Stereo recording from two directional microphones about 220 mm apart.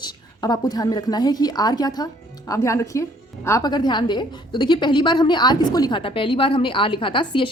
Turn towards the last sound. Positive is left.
turn(degrees=25)  # may be behind; listen again after turning